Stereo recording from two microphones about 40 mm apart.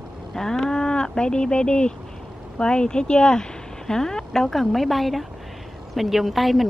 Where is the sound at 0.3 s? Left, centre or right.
Centre.